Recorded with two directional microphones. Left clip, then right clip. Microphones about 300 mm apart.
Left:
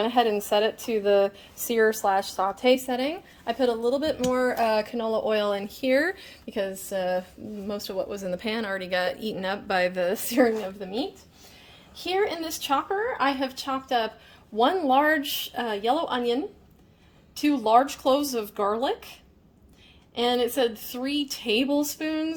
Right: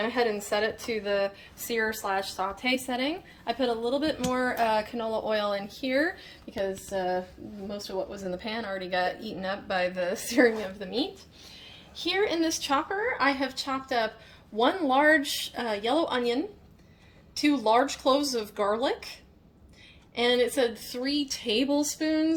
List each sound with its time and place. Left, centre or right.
0.0 s a woman's voice: left
17.5 s a woman's voice: left
20.1 s a woman's voice: left